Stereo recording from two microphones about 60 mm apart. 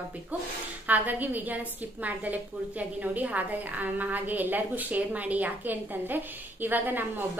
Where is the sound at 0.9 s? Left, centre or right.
Right.